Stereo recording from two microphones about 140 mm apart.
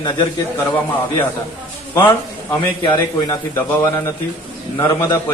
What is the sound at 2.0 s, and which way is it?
A man's voice, 35° left (ahead or behind).